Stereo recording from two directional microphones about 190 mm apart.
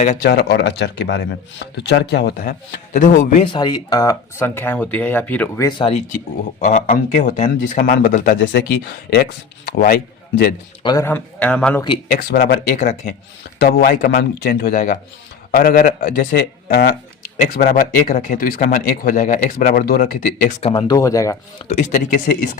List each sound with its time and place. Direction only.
0.2 s speech: 60° left (ahead or behind)
3.4 s speech: 25° left (ahead or behind); by 5.6 s 10° left (ahead or behind)
5.6 s speech: 25° left (ahead or behind)
6.7 s speech: 35° left (ahead or behind)
8.4 s a man's voice: 65° left (ahead or behind)
10.8 s speech: 15° left (ahead or behind)
12.3 s speech: 50° left (ahead or behind)
13.6 s speech: 50° left (ahead or behind)
20.6 s speech: 30° left (ahead or behind)
21.7 s speech: 40° left (ahead or behind)